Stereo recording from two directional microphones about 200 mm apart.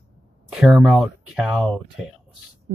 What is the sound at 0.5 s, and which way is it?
Speech, 5° right (ahead or behind).